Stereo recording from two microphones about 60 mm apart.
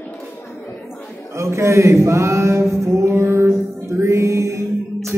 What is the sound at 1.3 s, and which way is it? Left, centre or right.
Speech, right.